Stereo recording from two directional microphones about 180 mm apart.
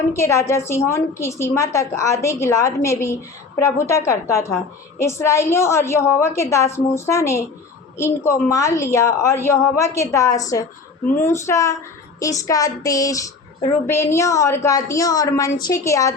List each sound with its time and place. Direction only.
0.1 s a woman's voice: 15° left (ahead or behind)